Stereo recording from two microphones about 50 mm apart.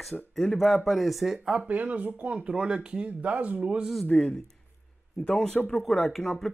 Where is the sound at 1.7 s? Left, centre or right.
Right.